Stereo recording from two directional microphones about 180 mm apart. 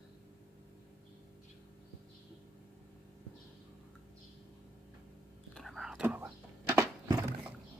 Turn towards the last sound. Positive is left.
turn(degrees=-15)  # may be behind; listen again after turning